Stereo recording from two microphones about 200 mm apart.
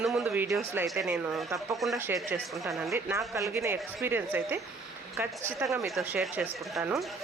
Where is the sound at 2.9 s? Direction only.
15° right (ahead or behind).